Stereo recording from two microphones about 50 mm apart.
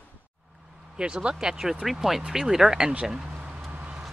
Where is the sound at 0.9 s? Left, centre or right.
Centre.